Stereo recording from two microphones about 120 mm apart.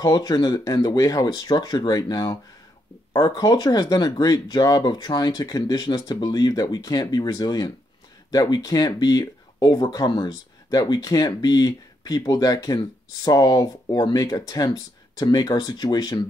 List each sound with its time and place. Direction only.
0.0 s speech: 35° left (ahead or behind)